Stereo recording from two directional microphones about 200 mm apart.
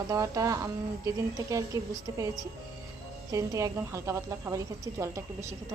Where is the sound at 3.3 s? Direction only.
15° right (ahead or behind).